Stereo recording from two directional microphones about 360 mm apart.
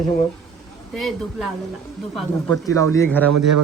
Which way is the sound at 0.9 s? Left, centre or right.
Centre.